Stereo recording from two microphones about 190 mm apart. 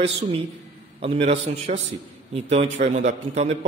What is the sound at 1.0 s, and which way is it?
A man's voice, 35° right (ahead or behind).